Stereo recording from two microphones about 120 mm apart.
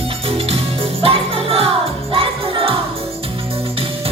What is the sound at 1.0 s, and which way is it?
Music, 50° right (ahead or behind).